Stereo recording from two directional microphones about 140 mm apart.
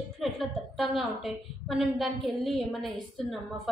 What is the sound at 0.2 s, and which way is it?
A woman's voice, centre (ahead or behind).